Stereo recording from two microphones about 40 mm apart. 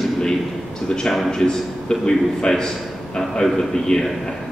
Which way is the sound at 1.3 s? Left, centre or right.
Centre.